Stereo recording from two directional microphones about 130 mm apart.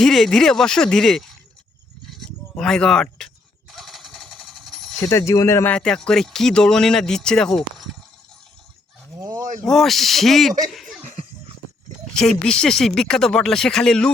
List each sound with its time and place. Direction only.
0.0 s speech: 5° left (ahead or behind)
2.1 s a sound: 5° left (ahead or behind)
4.9 s speech: 20° left (ahead or behind)
5.7 s speech: 5° left (ahead or behind)
9.1 s a sound: 25° right (ahead or behind)
9.6 s speech: centre (ahead or behind)
10.7 s laughter: centre (ahead or behind)
11.0 s a sound: 55° right (ahead or behind)
12.1 s speech: 5° left (ahead or behind)